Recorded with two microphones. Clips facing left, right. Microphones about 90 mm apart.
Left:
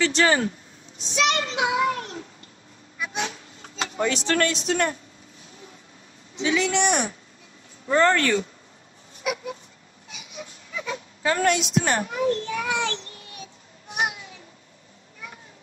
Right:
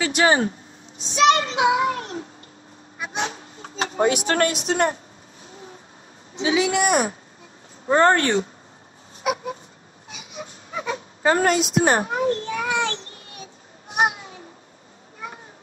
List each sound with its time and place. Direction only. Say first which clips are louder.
0.2 s a child's voice: right 6 dB; 30° right (ahead or behind)
3.0 s a sound: right 2 dB; 40° right (ahead or behind)
4.4 s a man's voice: right 2 dB; 45° right (ahead or behind)
6.4 s a man's voice: right 2 dB; 50° right (ahead or behind)
8.0 s a child's voice: right 2 dB; 30° right (ahead or behind)
13.9 s children playing: right 6 dB; 45° right (ahead or behind)